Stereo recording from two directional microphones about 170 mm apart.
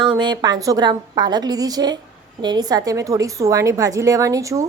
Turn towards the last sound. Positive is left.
turn(degrees=-20)  # may be behind; listen again after turning